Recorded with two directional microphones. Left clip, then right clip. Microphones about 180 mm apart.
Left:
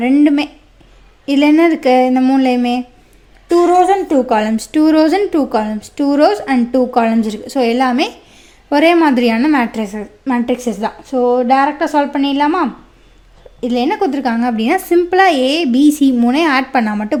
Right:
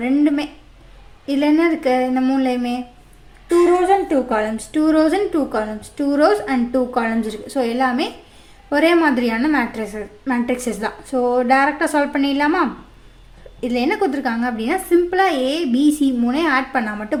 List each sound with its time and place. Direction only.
0.0 s a woman's voice: 35° left (ahead or behind)
3.7 s a woman's voice: 50° left (ahead or behind)